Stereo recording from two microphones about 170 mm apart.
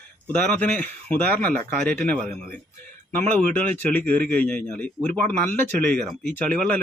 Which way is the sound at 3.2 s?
45° right (ahead or behind).